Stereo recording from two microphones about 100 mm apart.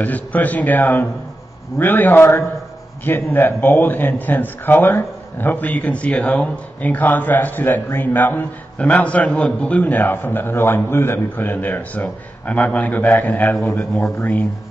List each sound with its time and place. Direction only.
0.0 s a man's voice: 15° left (ahead or behind)